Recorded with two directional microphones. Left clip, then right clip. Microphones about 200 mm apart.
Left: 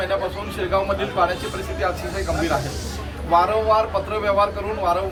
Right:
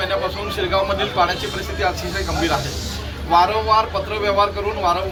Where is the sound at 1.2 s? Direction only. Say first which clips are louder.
Right 2 dB; 5° left (ahead or behind).